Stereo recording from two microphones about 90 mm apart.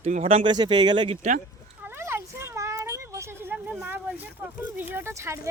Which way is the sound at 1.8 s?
25° right (ahead or behind).